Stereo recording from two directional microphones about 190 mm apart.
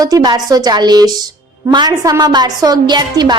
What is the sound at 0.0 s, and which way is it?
A woman's voice, 20° right (ahead or behind).